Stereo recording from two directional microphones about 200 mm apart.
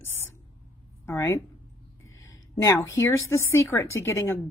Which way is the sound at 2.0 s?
80° left.